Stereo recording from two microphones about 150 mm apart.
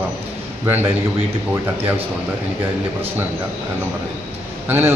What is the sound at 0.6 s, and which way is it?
Speech, 15° right (ahead or behind).